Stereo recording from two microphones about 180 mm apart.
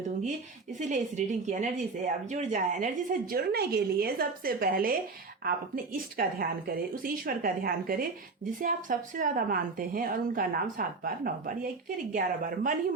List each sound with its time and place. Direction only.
0.8 s speech: 45° right (ahead or behind)